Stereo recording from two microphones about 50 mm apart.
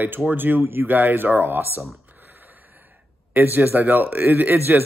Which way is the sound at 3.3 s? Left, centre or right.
Right.